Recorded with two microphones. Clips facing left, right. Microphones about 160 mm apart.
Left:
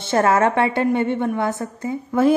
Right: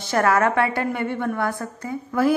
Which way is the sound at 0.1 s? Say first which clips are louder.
Left 2 dB; 25° left (ahead or behind).